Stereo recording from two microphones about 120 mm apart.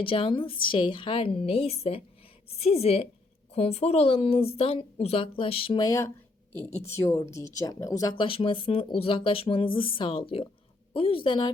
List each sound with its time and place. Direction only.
0.0 s a woman's voice: 50° left (ahead or behind)
5.7 s speech: 35° left (ahead or behind)
6.8 s speech: 20° left (ahead or behind)
8.1 s speech: 45° left (ahead or behind)